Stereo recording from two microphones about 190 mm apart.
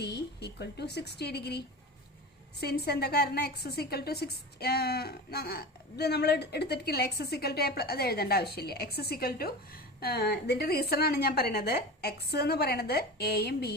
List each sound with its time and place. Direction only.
0.0 s a woman's voice: 60° left (ahead or behind)